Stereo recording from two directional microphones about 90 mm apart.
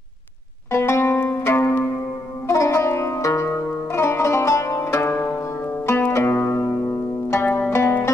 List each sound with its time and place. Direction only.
0.7 s zither: 30° left (ahead or behind)
2.4 s music: 35° left (ahead or behind)
5.9 s zither: 25° left (ahead or behind)